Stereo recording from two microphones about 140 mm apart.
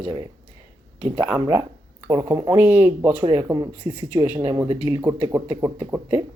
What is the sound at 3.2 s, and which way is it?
Speech, 25° right (ahead or behind).